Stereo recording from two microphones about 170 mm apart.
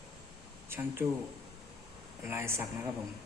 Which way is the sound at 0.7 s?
15° right (ahead or behind).